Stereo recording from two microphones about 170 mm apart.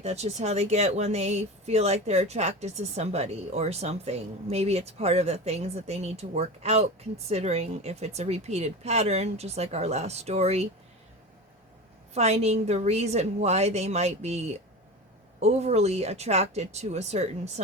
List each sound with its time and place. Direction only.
0.0 s speech: 40° right (ahead or behind)
12.1 s speech: 40° right (ahead or behind)